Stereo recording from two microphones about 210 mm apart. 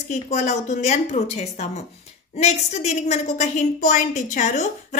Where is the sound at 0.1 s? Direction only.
35° left (ahead or behind).